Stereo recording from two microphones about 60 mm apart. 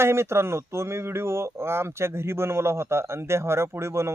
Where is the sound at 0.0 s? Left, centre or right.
Right.